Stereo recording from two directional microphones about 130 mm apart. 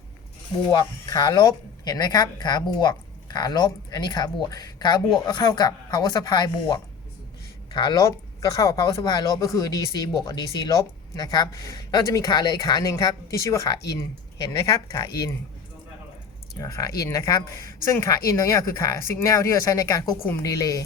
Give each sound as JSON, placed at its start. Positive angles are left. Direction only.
{"t": 0.7, "sound": "speech", "side_deg": 35}
{"t": 16.6, "sound": "speech", "side_deg": 25}